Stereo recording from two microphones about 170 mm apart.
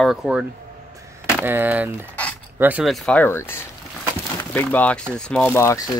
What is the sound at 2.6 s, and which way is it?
Speech, 5° right (ahead or behind).